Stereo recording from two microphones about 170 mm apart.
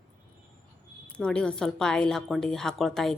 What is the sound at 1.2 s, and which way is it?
A woman's voice, 5° left (ahead or behind).